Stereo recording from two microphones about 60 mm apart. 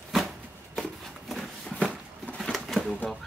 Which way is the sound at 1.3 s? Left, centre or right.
Centre.